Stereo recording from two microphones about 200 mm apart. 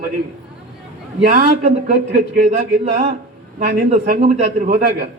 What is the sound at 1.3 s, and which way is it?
Speech, 40° right (ahead or behind).